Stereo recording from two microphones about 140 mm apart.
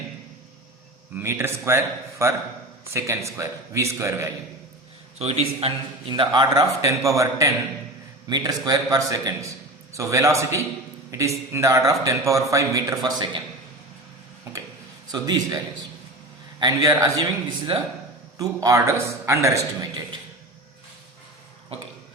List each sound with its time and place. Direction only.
1.1 s a man's voice: 15° right (ahead or behind)
5.2 s a man's voice: 45° right (ahead or behind)
6.1 s a man's voice: 35° right (ahead or behind)
15.1 s a man's voice: 30° right (ahead or behind)
16.6 s a man's voice: 25° right (ahead or behind)
18.3 s a man's voice: 25° right (ahead or behind)